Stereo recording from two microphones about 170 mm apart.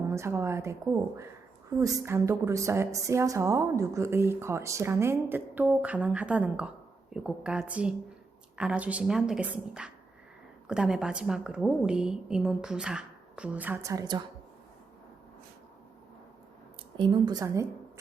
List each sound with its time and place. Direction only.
0.1 s a woman's voice: 15° right (ahead or behind)
17.0 s a woman's voice: 25° right (ahead or behind)